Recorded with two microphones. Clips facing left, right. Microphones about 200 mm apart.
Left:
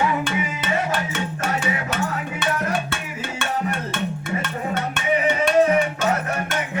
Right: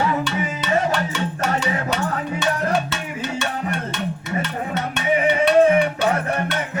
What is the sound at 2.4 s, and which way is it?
Music, 55° left (ahead or behind).